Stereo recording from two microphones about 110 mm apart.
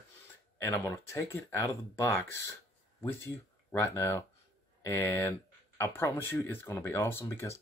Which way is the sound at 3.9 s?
25° left (ahead or behind).